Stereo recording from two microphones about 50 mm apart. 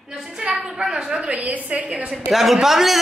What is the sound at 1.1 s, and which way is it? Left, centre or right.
Speech, right.